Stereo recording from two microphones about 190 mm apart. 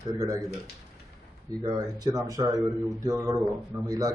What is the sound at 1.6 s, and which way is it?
Speech, 20° right (ahead or behind).